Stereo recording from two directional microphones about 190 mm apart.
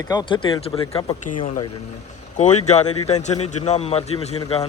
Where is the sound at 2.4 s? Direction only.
35° left (ahead or behind).